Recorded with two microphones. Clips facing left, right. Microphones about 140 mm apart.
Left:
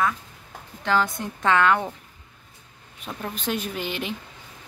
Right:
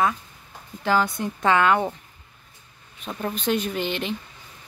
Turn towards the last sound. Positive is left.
turn(degrees=5)  # may be behind; listen again after turning